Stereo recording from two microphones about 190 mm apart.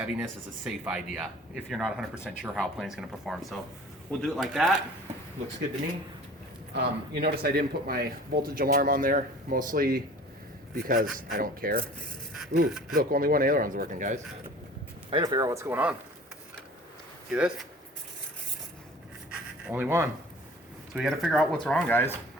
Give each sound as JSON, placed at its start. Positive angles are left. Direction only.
{"t": 0.0, "sound": "speech", "side_deg": -5}
{"t": 6.7, "sound": "speech", "side_deg": -60}
{"t": 15.1, "sound": "speech", "side_deg": -20}
{"t": 17.3, "sound": "speech", "side_deg": -5}
{"t": 19.6, "sound": "speech", "side_deg": -10}